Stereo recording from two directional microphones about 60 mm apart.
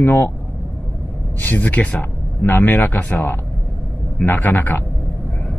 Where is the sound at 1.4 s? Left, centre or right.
Left.